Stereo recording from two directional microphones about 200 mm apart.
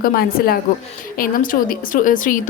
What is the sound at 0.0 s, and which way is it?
A woman's voice, 45° left (ahead or behind).